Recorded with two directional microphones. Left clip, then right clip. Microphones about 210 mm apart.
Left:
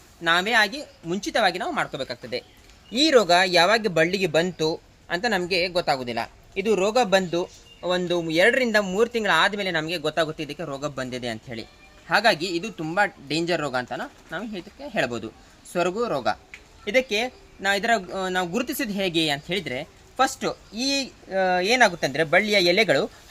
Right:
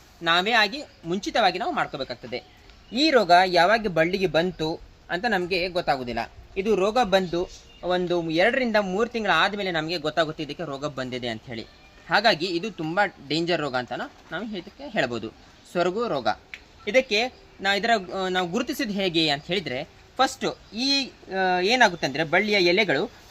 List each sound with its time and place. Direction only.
0.2 s a woman's voice: 15° left (ahead or behind); by 23.0 s 35° left (ahead or behind)